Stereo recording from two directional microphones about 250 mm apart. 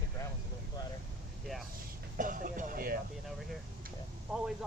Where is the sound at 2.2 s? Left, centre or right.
Right.